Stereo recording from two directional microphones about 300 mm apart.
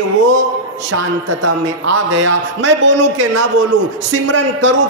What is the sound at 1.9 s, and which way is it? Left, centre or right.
A man's voice, right.